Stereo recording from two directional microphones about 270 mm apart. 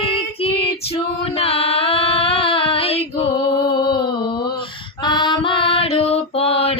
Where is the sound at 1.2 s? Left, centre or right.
Left.